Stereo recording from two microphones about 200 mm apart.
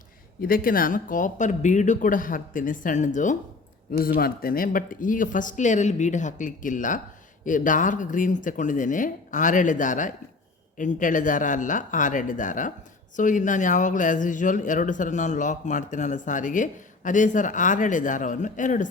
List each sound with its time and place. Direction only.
0.4 s speech: 45° left (ahead or behind)